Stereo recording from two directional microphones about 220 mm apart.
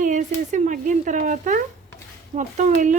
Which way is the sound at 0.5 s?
35° right (ahead or behind).